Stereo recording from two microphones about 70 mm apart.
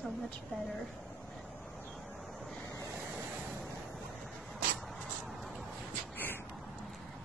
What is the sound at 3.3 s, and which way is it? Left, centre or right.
Waves, centre.